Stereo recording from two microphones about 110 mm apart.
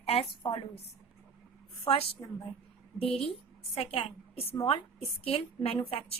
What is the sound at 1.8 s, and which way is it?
Speech, 60° left (ahead or behind).